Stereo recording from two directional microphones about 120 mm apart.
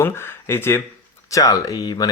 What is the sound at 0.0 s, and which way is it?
Speech, 20° left (ahead or behind).